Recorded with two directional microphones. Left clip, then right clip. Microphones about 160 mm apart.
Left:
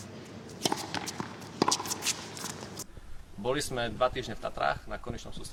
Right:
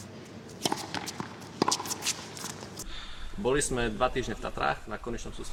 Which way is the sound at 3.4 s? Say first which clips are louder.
Right 3 dB; 30° left (ahead or behind).